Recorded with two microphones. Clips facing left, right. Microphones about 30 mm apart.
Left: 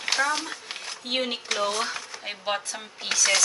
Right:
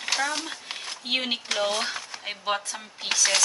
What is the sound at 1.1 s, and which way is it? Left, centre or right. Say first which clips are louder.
Speech: right 1 dB; right.